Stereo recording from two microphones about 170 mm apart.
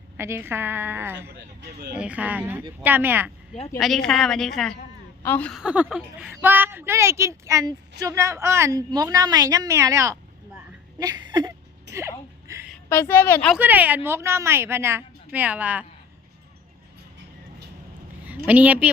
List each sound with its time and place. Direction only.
0.2 s a woman's voice: 15° right (ahead or behind)
3.8 s a woman's voice: centre (ahead or behind)
5.6 s a woman's voice: 5° right (ahead or behind)
10.9 s a sound: 25° right (ahead or behind)
12.9 s speech: 15° left (ahead or behind)
13.6 s a woman's voice: 10° right (ahead or behind)
18.4 s a woman's voice: 10° right (ahead or behind)